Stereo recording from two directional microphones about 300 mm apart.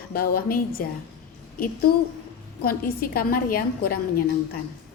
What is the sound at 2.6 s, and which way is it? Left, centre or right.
A woman's voice, left.